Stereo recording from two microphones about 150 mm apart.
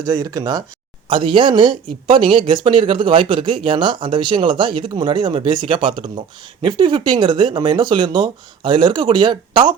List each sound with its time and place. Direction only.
0.0 s speech: 25° right (ahead or behind)